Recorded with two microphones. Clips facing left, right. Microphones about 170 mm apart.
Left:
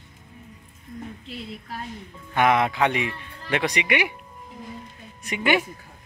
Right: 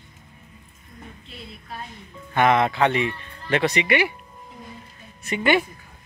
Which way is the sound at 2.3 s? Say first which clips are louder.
Right 1 dB; 10° left (ahead or behind).